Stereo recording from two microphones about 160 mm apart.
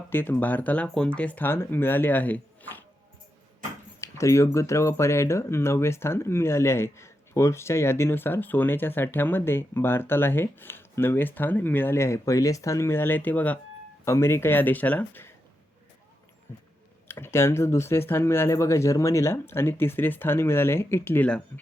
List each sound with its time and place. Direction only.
0.1 s speech: 15° left (ahead or behind)
4.0 s speech: 20° left (ahead or behind)
17.1 s speech: 15° left (ahead or behind)